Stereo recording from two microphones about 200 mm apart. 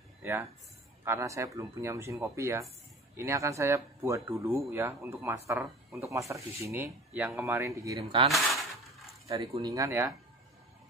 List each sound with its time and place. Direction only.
0.2 s speech: 10° right (ahead or behind)
8.0 s cutlery: 30° right (ahead or behind)
9.4 s cutlery: 30° right (ahead or behind)
9.7 s speech: 15° right (ahead or behind)